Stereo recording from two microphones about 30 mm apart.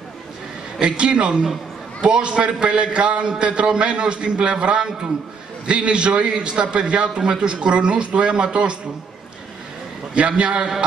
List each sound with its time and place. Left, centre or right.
0.7 s a man's voice: right
10.1 s a man's voice: right